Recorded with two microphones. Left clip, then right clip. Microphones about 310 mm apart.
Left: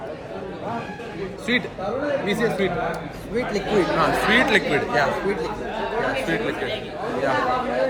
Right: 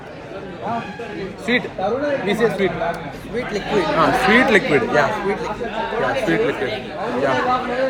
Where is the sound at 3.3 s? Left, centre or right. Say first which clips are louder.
Right 1 dB; left.